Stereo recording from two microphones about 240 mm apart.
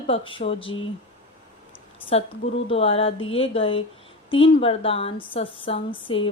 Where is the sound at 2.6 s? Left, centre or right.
Left.